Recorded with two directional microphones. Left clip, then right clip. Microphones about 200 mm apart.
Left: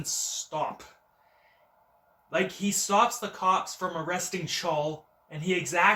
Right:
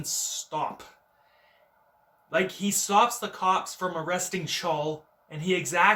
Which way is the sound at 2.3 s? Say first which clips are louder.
Right 2 dB; 15° right (ahead or behind).